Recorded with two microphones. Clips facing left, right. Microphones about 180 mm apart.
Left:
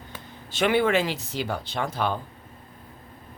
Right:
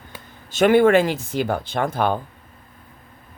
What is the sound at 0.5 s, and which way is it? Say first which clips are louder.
Speech: right 7 dB; 45° right (ahead or behind).